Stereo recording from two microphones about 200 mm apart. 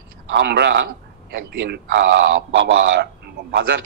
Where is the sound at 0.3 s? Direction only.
60° right (ahead or behind).